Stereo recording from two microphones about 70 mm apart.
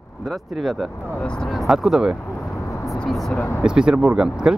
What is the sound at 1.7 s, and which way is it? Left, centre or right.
Speech, centre.